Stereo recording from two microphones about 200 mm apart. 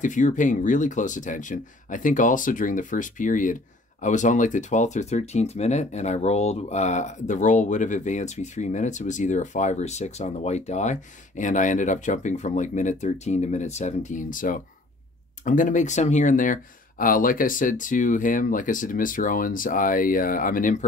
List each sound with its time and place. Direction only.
0.0 s speech: 40° left (ahead or behind)